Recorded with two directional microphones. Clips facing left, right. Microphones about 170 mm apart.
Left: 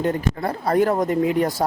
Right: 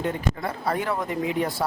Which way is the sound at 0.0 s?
40° left (ahead or behind).